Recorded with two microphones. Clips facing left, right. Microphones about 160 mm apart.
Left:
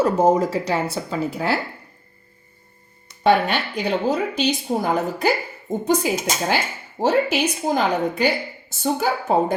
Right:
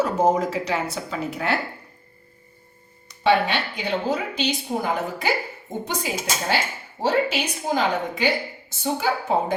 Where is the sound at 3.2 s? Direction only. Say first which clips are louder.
Left 2 dB; 45° left (ahead or behind).